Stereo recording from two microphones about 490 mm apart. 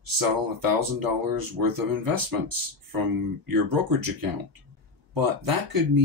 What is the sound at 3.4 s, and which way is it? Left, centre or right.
Speech, right.